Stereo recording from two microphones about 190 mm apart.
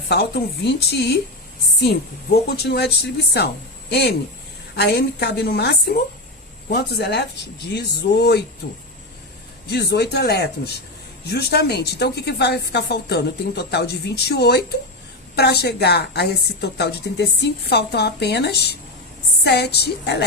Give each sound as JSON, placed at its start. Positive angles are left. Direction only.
{"t": 0.1, "sound": "a woman's voice", "side_deg": 60}
{"t": 2.3, "sound": "a woman's voice", "side_deg": 60}
{"t": 9.6, "sound": "a woman's voice", "side_deg": 60}